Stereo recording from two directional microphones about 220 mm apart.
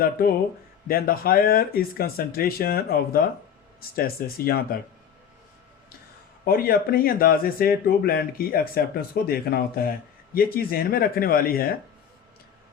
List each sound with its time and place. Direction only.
0.0 s speech: 40° left (ahead or behind)
6.4 s speech: 40° left (ahead or behind)